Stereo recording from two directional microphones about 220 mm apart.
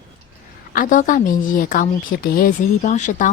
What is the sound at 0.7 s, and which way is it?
A woman's voice, 40° left (ahead or behind).